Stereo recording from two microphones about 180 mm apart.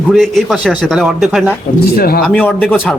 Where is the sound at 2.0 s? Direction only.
60° left (ahead or behind).